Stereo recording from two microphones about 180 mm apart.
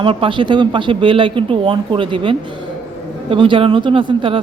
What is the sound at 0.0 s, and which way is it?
Speech, 30° right (ahead or behind).